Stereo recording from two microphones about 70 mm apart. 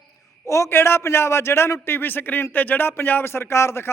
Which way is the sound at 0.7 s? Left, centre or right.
Left.